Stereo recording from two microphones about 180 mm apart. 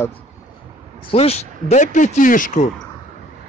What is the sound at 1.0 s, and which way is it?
Speech, 35° left (ahead or behind).